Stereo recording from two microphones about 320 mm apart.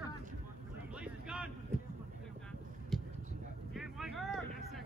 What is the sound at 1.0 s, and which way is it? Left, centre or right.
Vehicle, centre.